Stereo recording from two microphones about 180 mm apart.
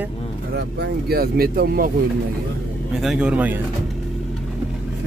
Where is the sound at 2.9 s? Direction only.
Centre (ahead or behind).